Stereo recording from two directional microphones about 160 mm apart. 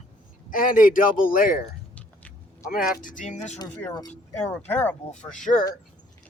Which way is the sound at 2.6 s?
65° left (ahead or behind).